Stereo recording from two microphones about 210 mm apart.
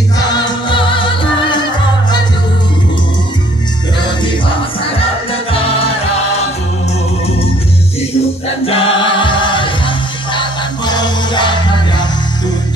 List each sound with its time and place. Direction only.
0.2 s music: 20° left (ahead or behind)
5.5 s music: 25° left (ahead or behind)
8.6 s music: 25° left (ahead or behind)